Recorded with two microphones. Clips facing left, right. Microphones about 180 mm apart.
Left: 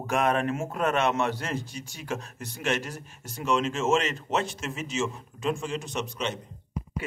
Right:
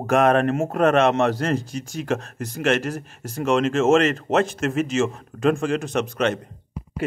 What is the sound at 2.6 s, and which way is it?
Speech, 90° right.